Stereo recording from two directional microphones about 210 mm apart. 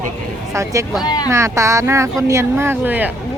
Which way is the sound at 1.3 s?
15° right (ahead or behind).